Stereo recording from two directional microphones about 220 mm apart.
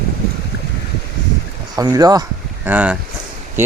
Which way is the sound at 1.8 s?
15° right (ahead or behind).